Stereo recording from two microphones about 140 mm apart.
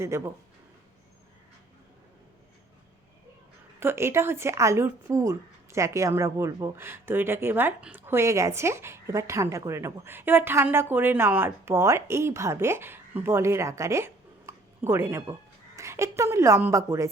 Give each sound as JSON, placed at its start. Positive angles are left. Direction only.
{"t": 0.1, "sound": "speech", "side_deg": -20}
{"t": 3.8, "sound": "speech", "side_deg": -15}